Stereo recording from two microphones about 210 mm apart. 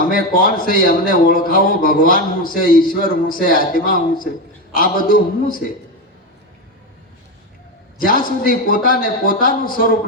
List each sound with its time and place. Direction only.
0.0 s a man's voice: 40° left (ahead or behind)
7.9 s a man's voice: 40° left (ahead or behind)